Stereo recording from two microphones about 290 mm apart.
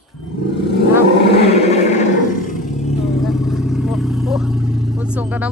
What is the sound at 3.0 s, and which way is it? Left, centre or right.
Vehicle, centre.